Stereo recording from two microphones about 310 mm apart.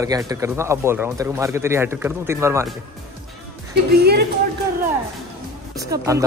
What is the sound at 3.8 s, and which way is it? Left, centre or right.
Speech, right.